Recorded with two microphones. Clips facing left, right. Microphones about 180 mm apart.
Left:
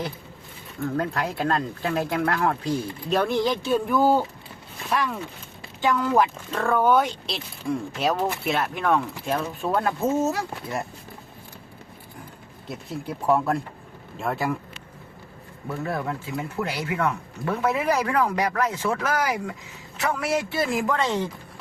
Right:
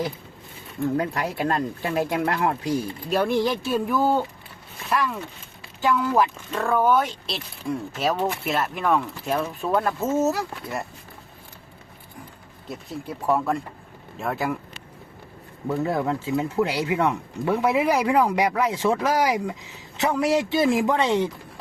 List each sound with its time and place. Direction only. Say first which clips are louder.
0.9 s speech: right 1 dB; 15° right (ahead or behind)
12.6 s speech: left 1 dB; centre (ahead or behind)
15.8 s speech: right 4 dB; 20° right (ahead or behind)